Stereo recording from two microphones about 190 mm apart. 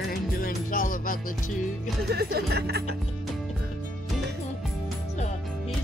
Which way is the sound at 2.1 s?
55° right (ahead or behind).